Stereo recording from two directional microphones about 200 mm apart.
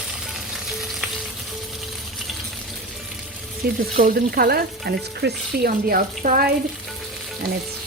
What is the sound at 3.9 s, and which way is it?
A woman's voice, 45° right (ahead or behind).